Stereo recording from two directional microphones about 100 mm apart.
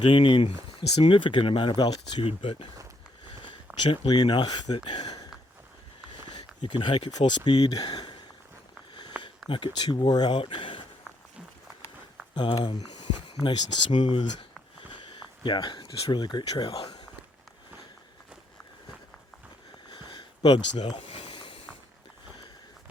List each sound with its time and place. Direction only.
0.0 s speech: 55° left (ahead or behind)
0.9 s speech: 75° left (ahead or behind)
3.2 s a sound: 55° left (ahead or behind)
3.8 s speech: 55° left (ahead or behind)
6.3 s speech: 55° left (ahead or behind)
9.5 s speech: 50° left (ahead or behind)
12.3 s speech: 55° left (ahead or behind)
12.6 s a sound: 50° left (ahead or behind)
13.4 s speech: 55° left (ahead or behind)
16.6 s speech: 60° left (ahead or behind)
19.9 s a sound: 55° left (ahead or behind)